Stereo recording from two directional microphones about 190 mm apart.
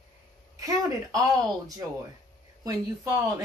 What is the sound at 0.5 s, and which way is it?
A woman's voice, 20° right (ahead or behind).